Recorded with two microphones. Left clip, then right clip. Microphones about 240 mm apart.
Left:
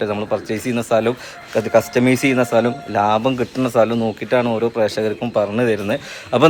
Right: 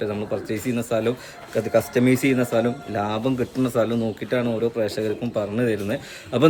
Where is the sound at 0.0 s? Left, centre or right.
Centre.